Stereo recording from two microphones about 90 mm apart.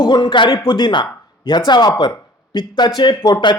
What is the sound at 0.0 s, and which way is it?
Speech, 55° left (ahead or behind).